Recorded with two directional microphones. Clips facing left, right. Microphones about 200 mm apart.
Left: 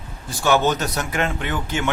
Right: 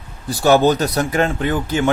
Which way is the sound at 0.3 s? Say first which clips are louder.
Right 6 dB; 35° right (ahead or behind).